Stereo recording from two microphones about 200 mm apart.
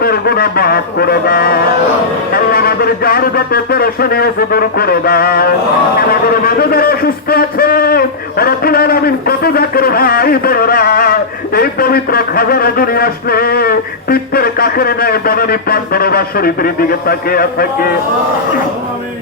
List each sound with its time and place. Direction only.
0.0 s speech: 50° left (ahead or behind)